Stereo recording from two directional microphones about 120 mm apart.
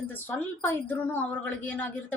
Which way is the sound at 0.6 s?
15° left (ahead or behind).